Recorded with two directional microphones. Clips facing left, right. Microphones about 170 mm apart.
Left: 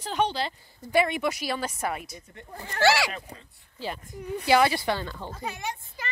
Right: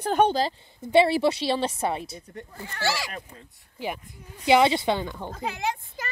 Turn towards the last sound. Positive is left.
turn(degrees=-45)  # may be behind; listen again after turning